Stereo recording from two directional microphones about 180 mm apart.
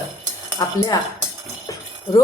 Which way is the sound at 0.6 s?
20° left (ahead or behind).